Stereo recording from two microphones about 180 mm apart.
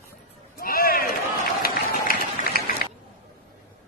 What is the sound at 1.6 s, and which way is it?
Run, 55° left (ahead or behind).